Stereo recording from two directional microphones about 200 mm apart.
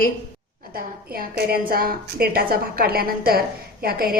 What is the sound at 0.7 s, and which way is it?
A woman's voice, 45° right (ahead or behind).